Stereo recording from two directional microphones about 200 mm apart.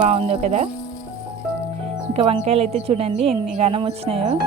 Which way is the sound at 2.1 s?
30° right (ahead or behind).